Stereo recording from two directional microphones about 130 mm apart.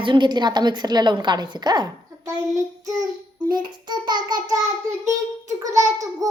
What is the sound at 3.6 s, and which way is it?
Speech, 35° right (ahead or behind).